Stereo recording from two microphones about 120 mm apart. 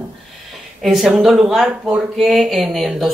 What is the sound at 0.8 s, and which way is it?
Speech, centre (ahead or behind).